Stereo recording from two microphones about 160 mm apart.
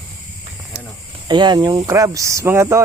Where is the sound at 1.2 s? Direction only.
30° right (ahead or behind).